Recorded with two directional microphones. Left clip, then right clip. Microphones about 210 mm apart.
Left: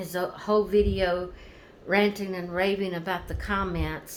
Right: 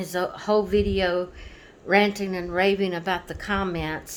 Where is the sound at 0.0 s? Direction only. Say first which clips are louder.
Right 3 dB; 45° right (ahead or behind).